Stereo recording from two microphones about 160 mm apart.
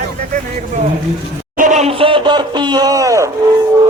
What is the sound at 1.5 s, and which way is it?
Speech, 50° right (ahead or behind).